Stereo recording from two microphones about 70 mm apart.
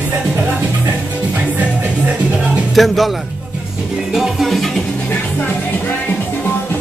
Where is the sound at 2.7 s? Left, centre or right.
Centre.